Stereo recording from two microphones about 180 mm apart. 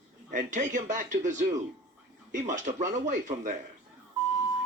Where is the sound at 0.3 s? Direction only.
45° right (ahead or behind).